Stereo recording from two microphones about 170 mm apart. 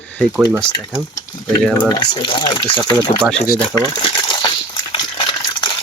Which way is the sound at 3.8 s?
25° left (ahead or behind).